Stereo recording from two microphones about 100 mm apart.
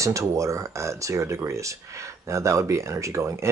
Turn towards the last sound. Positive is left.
turn(degrees=-30)  # may be behind; listen again after turning